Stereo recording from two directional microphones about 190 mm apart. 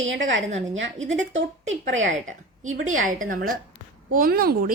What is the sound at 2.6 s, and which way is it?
A woman's voice, 40° right (ahead or behind).